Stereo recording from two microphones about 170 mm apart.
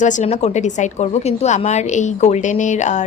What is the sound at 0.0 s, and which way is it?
A woman's voice, 45° left (ahead or behind).